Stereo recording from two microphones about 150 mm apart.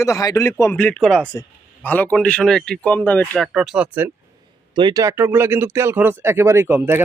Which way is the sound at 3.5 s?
5° right (ahead or behind).